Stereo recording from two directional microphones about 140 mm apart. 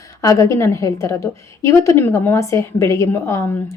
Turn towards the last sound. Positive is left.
turn(degrees=20)  # may be behind; listen again after turning